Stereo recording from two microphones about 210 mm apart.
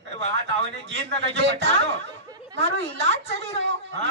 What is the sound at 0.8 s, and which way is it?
A man's voice, 60° right (ahead or behind).